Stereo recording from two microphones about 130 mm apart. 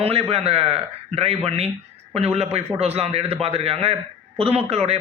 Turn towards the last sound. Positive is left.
turn(degrees=-50)  # may be behind; listen again after turning